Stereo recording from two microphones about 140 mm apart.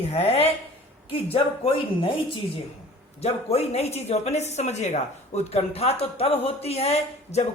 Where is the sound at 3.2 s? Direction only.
50° left (ahead or behind).